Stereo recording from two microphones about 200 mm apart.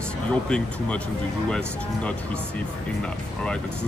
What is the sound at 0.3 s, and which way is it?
Speech, 5° left (ahead or behind).